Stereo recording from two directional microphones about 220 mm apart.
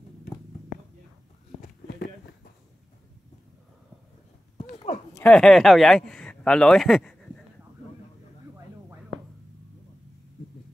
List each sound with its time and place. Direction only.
1.6 s walk: 40° left (ahead or behind)
4.6 s a sound: 30° left (ahead or behind)
5.1 s speech: 5° left (ahead or behind)